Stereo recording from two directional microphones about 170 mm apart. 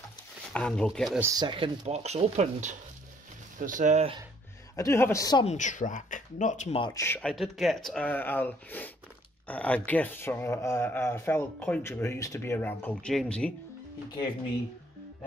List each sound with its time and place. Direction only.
0.5 s speech: 5° left (ahead or behind)
1.2 s speech: 25° right (ahead or behind); by 4.1 s 45° right (ahead or behind)
4.7 s a man's voice: 15° left (ahead or behind)
5.4 s speech: 45° left (ahead or behind)
6.8 s a man's voice: 20° left (ahead or behind)
7.2 s a man's voice: 5° left (ahead or behind)